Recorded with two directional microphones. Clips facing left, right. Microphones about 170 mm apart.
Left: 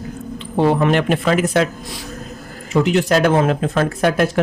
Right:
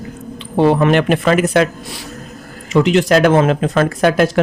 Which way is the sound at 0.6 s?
75° right (ahead or behind).